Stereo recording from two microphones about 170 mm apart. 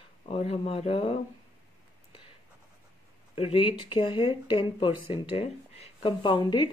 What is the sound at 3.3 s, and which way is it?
Speech, 35° left (ahead or behind).